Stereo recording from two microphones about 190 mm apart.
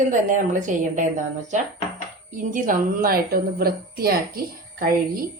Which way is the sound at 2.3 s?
45° right (ahead or behind).